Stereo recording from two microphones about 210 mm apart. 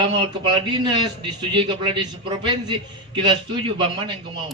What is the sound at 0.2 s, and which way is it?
A man's voice, 20° right (ahead or behind).